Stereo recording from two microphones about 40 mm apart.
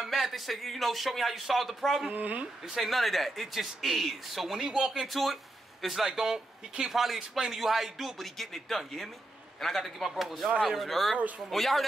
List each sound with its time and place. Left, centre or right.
0.0 s speech: centre
2.0 s speech: right
2.6 s speech: centre
2.9 s speech: centre
4.6 s speech: right
4.9 s speech: centre
11.1 s speech: right
11.5 s speech: centre